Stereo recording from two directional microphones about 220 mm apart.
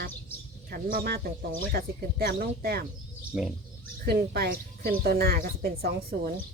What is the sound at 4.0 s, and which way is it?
Speech, 45° right (ahead or behind).